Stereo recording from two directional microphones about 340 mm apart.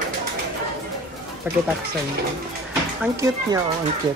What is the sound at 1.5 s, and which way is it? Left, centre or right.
Speech, centre.